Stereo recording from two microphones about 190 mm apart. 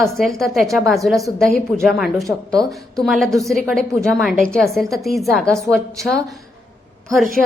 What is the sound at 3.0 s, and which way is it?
A woman's voice, centre (ahead or behind).